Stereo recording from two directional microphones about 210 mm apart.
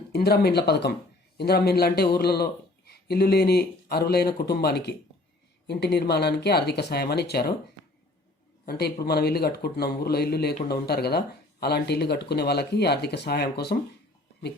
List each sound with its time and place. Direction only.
0.1 s speech: 50° left (ahead or behind)
8.6 s speech: 50° left (ahead or behind)